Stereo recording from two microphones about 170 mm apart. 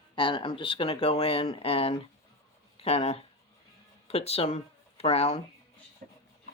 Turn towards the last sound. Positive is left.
turn(degrees=40)  # may be behind; listen again after turning